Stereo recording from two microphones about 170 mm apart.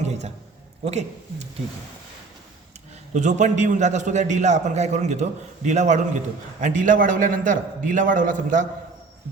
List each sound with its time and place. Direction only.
0.0 s a sound: 40° right (ahead or behind)
0.9 s speech: 40° right (ahead or behind)
3.1 s a man's voice: 45° right (ahead or behind)